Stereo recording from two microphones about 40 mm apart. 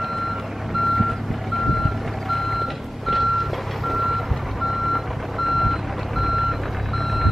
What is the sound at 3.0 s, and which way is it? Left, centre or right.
Reversing beeps, centre.